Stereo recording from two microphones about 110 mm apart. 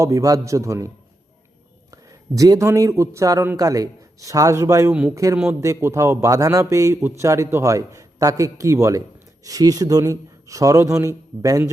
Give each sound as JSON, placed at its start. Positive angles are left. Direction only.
{"t": 0.0, "sound": "a man's voice", "side_deg": -30}
{"t": 1.9, "sound": "a man's voice", "side_deg": -30}
{"t": 4.9, "sound": "a man's voice", "side_deg": -10}
{"t": 5.1, "sound": "a man's voice", "side_deg": -30}